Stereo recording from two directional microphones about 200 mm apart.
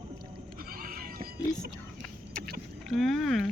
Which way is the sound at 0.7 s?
45° right (ahead or behind).